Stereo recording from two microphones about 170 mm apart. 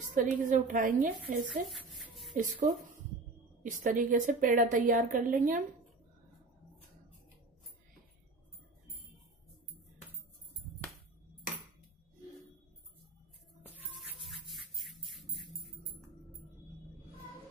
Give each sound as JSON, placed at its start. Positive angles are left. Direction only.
{"t": 0.1, "sound": "a woman's voice", "side_deg": -50}
{"t": 1.2, "sound": "speech", "side_deg": 0}
{"t": 2.0, "sound": "a sound", "side_deg": 0}
{"t": 2.3, "sound": "a woman's voice", "side_deg": -50}
{"t": 13.7, "sound": "music", "side_deg": -5}